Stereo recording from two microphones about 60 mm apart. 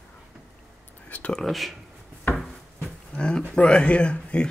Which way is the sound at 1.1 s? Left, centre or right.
Left.